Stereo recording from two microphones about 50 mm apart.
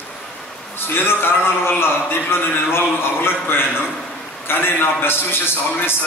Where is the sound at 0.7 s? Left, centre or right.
Left.